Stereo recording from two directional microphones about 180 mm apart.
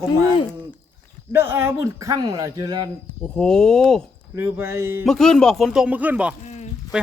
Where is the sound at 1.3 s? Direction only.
15° right (ahead or behind).